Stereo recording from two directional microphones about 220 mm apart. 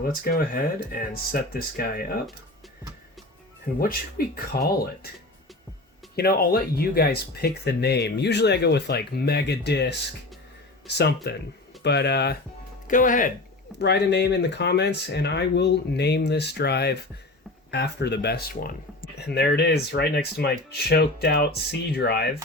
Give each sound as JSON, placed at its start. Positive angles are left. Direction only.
{"t": 0.0, "sound": "speech", "side_deg": 45}
{"t": 3.7, "sound": "speech", "side_deg": 35}
{"t": 6.1, "sound": "speech", "side_deg": 45}
{"t": 12.9, "sound": "speech", "side_deg": 35}
{"t": 13.7, "sound": "speech", "side_deg": 50}